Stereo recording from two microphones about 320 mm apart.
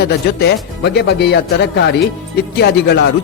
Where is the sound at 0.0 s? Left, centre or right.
Left.